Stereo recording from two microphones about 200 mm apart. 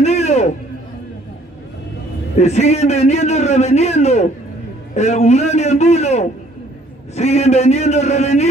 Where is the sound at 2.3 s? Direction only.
35° left (ahead or behind).